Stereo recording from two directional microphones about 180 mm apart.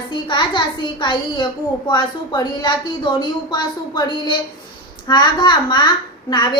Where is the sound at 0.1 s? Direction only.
25° left (ahead or behind).